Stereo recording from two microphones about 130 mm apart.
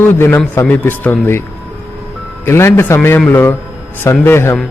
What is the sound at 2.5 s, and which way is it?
A man's voice, 20° left (ahead or behind).